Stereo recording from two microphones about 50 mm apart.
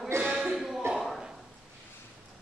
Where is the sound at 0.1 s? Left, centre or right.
Right.